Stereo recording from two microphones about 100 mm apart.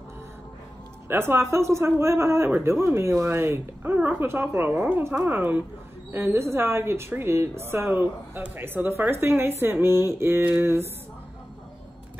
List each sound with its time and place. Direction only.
1.0 s a woman's voice: 25° right (ahead or behind)